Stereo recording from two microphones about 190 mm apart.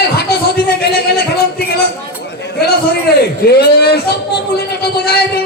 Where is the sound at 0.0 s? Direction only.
55° left (ahead or behind).